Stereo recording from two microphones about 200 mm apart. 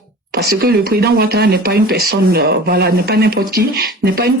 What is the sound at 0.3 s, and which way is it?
Speech, 55° right (ahead or behind).